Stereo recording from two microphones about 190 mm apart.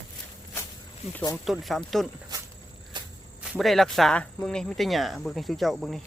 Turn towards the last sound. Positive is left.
turn(degrees=0)  # may be behind; listen again after turning